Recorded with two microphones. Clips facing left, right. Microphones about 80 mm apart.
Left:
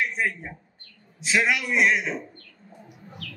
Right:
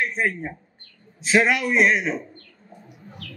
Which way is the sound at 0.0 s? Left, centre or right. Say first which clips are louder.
Right 3 dB; right.